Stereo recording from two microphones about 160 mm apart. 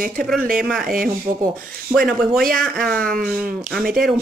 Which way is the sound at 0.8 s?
65° right (ahead or behind).